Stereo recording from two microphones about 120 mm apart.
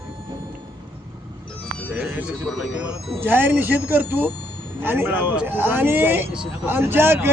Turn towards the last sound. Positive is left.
turn(degrees=-20)  # may be behind; listen again after turning